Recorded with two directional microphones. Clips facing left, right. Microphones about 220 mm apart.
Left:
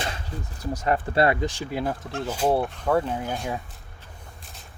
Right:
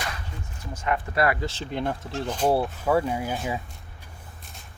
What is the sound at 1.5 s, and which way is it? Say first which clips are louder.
Speech: left 1 dB; 10° left (ahead or behind).